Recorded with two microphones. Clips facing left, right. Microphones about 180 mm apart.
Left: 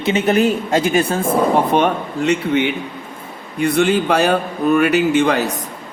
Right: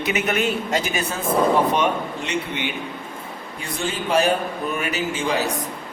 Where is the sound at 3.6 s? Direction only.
70° left (ahead or behind).